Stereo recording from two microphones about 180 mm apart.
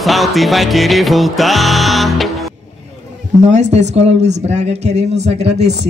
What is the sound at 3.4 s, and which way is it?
Speech, 40° right (ahead or behind).